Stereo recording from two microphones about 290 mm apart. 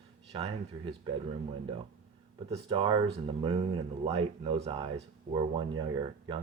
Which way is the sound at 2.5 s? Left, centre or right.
Centre.